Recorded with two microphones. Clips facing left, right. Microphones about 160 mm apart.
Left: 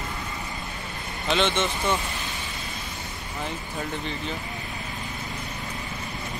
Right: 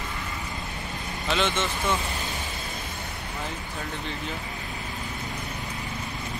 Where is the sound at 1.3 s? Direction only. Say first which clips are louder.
Left 2 dB; 5° right (ahead or behind).